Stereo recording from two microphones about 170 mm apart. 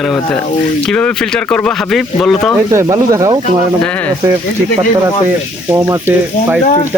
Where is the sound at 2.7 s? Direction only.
20° right (ahead or behind).